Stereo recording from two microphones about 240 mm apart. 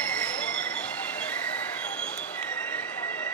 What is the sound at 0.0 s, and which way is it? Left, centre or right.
Train, centre.